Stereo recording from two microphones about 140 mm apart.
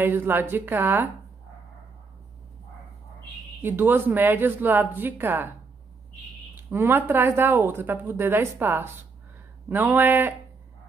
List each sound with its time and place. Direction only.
0.0 s speech: 15° right (ahead or behind)
3.6 s speech: 15° right (ahead or behind)
6.7 s speech: 15° right (ahead or behind)